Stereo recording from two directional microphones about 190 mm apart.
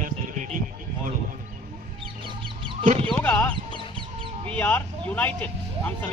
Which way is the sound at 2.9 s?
30° right (ahead or behind).